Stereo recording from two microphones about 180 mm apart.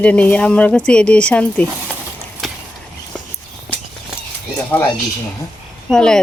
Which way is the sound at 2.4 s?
Centre (ahead or behind).